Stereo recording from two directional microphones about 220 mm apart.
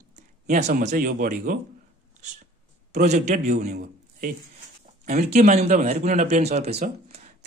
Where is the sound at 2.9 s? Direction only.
30° right (ahead or behind).